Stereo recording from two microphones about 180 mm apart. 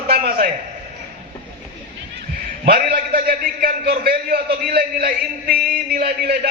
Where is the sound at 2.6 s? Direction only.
55° right (ahead or behind).